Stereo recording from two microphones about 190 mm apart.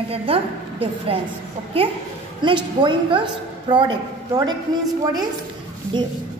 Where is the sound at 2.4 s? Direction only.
25° right (ahead or behind).